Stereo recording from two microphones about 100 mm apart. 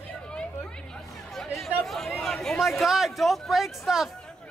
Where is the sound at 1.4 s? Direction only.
Centre (ahead or behind).